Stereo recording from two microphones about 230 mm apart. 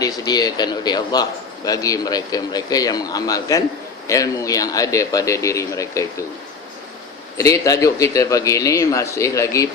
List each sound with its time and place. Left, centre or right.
0.0 s a man's voice: centre
7.3 s a man's voice: centre